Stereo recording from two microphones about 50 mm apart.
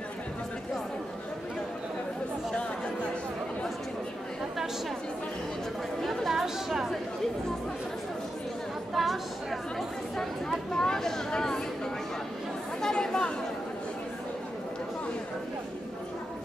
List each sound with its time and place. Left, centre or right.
6.0 s chatter: centre
8.9 s chatter: centre
10.7 s a sound: centre
12.8 s chatter: centre